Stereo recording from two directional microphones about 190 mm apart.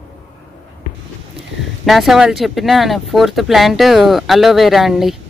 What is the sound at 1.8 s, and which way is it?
Speech, centre (ahead or behind).